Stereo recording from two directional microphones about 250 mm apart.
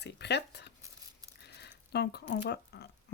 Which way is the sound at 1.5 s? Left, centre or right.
Left.